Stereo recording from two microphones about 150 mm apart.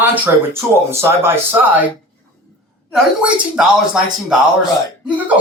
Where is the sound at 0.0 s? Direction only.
15° right (ahead or behind).